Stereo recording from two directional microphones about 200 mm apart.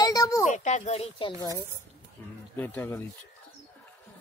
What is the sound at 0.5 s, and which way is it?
Speech, 35° left (ahead or behind).